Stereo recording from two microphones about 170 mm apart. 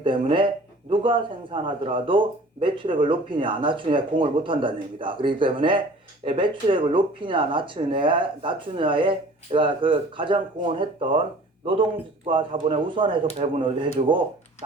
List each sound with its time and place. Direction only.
0.0 s a man's voice: 30° right (ahead or behind)